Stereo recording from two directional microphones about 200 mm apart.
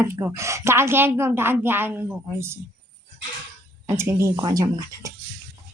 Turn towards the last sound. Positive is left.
turn(degrees=-20)  # may be behind; listen again after turning